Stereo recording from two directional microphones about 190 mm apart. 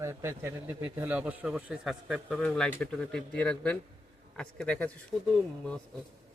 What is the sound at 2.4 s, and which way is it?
Speech, 10° left (ahead or behind).